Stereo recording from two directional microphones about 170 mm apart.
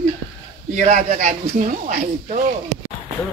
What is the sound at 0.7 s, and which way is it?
A man's voice, 45° right (ahead or behind).